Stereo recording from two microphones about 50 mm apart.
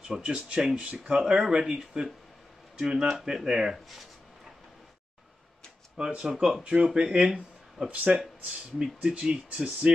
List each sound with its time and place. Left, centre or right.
0.1 s speech: centre
5.9 s speech: centre
6.2 s speech: centre
6.6 s speech: right
7.9 s speech: right